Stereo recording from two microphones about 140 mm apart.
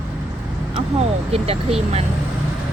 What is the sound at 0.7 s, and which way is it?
Speech, 45° right (ahead or behind).